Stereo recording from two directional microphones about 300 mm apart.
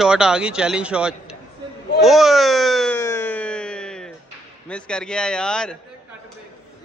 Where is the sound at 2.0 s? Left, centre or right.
Centre.